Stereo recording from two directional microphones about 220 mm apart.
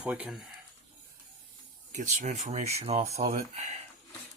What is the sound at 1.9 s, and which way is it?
Speech, 35° right (ahead or behind).